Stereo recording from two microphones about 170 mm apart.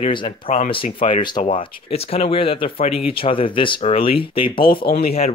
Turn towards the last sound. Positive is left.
turn(degrees=65)  # may be behind; listen again after turning